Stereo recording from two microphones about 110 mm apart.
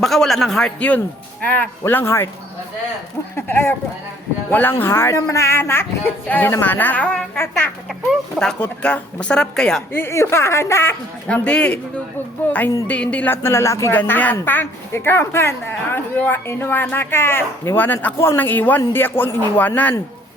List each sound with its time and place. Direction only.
0.0 s speech: centre (ahead or behind); by 2.3 s 20° left (ahead or behind)
3.3 s speech: 20° left (ahead or behind)
9.9 s speech: 20° left (ahead or behind)
11.4 s speech: 10° left (ahead or behind); by 13.9 s 25° left (ahead or behind)
13.9 s speech: 15° left (ahead or behind)